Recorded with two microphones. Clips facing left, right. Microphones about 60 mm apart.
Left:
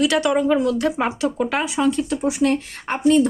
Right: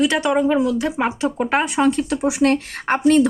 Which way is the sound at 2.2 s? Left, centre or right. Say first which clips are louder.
Right 2 dB; right.